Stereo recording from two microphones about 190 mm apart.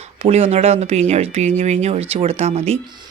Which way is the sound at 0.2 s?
30° right (ahead or behind).